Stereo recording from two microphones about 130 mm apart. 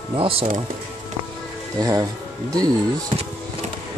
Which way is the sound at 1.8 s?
25° right (ahead or behind).